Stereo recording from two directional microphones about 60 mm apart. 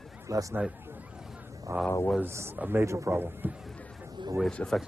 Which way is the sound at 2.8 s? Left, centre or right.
Right.